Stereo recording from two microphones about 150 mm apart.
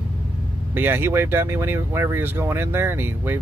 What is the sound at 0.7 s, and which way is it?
Speech, 15° right (ahead or behind).